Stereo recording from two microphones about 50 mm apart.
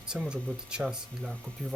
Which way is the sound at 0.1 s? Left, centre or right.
Centre.